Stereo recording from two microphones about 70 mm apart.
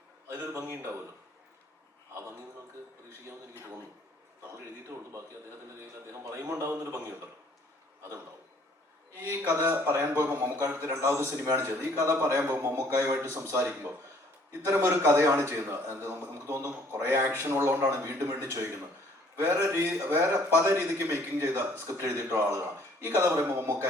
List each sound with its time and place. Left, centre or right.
0.5 s a sound: right
6.3 s a man's voice: right
9.2 s a man's voice: right
10.8 s a man's voice: right